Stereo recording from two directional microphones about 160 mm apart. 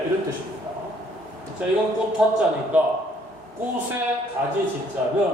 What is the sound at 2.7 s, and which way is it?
Speech, 10° right (ahead or behind).